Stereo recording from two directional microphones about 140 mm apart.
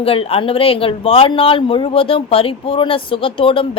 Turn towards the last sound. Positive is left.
turn(degrees=40)  # may be behind; listen again after turning